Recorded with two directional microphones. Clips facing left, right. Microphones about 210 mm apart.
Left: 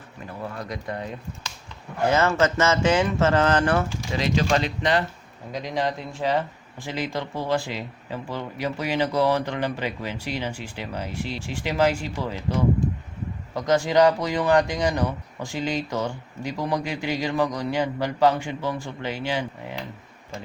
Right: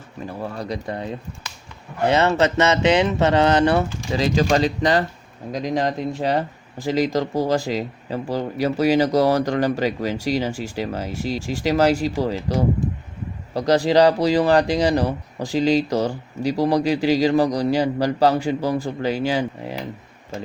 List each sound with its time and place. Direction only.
0.6 s speech: 30° right (ahead or behind)
2.0 s speech: 20° right (ahead or behind)
4.5 s speech: 35° right (ahead or behind)
13.5 s speech: 35° right (ahead or behind)